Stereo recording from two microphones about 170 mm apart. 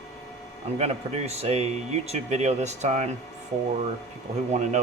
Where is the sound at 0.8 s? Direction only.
40° right (ahead or behind).